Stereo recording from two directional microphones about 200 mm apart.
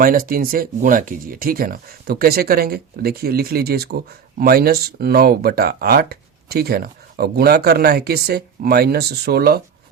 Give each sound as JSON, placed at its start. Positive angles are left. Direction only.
{"t": 0.0, "sound": "speech", "side_deg": -45}